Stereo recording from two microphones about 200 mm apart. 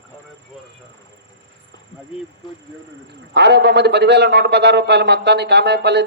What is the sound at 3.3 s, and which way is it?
A man's voice, 55° right (ahead or behind).